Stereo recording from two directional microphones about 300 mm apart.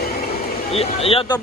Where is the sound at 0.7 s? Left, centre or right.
Centre.